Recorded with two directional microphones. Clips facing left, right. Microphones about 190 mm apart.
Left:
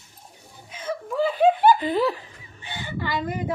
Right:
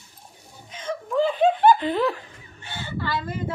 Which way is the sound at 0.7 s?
10° left (ahead or behind).